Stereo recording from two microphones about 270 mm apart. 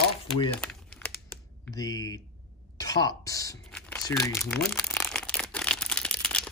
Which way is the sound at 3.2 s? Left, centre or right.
Centre.